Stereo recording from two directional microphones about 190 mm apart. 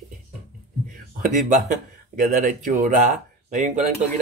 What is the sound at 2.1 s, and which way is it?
Speech, 45° right (ahead or behind).